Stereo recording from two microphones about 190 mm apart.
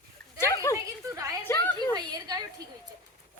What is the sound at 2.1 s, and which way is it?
Speech, 20° right (ahead or behind).